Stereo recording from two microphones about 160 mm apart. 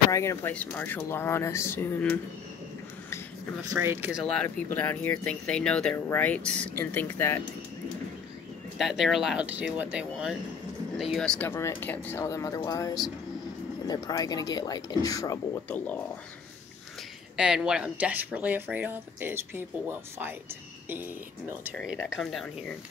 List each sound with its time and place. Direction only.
0.1 s speech: 20° left (ahead or behind)
3.6 s speech: 15° right (ahead or behind)
4.1 s speech: 5° left (ahead or behind)
8.7 s speech: centre (ahead or behind); by 15.4 s 20° left (ahead or behind)
17.4 s speech: 5° right (ahead or behind)
22.1 s speech: centre (ahead or behind)